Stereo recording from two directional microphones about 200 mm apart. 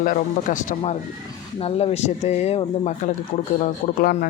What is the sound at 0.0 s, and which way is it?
Speech, 40° left (ahead or behind).